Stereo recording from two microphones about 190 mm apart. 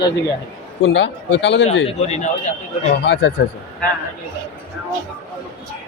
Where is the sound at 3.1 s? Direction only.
75° left (ahead or behind).